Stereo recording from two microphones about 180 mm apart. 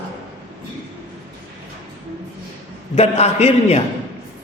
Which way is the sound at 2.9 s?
35° left (ahead or behind).